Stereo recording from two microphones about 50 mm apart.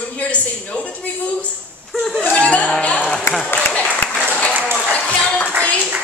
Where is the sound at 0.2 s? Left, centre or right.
Left.